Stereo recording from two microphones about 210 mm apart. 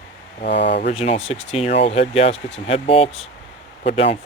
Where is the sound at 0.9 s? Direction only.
30° left (ahead or behind).